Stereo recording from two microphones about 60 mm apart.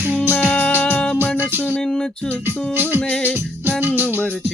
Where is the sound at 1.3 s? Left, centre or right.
Right.